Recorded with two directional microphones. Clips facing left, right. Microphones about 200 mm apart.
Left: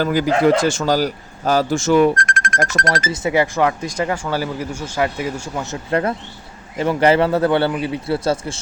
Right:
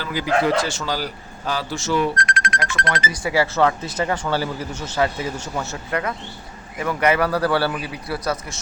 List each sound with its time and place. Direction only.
0.0 s a man's voice: 50° left (ahead or behind)
3.1 s speech: 20° left (ahead or behind)
5.9 s a man's voice: 30° left (ahead or behind)